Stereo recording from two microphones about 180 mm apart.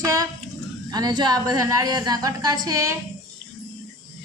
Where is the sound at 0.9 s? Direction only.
20° right (ahead or behind).